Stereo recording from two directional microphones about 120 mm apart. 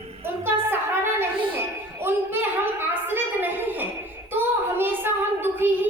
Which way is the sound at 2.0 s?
20° right (ahead or behind).